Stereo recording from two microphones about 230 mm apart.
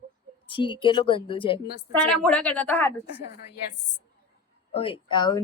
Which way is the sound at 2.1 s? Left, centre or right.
Centre.